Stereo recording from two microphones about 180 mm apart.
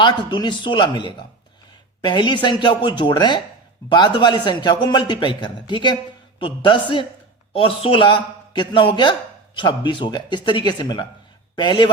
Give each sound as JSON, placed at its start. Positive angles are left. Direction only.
{"t": 0.0, "sound": "a man's voice", "side_deg": 25}